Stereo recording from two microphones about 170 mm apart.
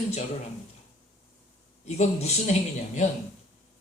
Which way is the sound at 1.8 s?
40° left (ahead or behind).